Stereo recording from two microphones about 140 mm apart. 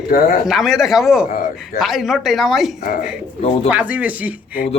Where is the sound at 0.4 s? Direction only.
Centre (ahead or behind).